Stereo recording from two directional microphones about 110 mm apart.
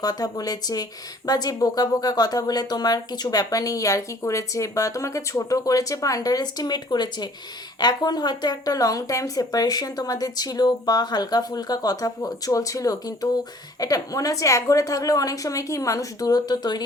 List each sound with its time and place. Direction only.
0.0 s speech: 35° left (ahead or behind)